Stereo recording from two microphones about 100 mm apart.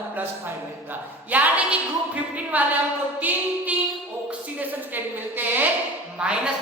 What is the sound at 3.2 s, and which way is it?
Female singing, 15° right (ahead or behind).